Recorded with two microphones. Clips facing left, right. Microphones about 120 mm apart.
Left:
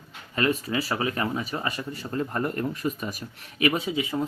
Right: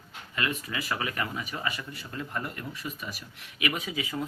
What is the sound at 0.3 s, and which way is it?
Speech, 35° left (ahead or behind).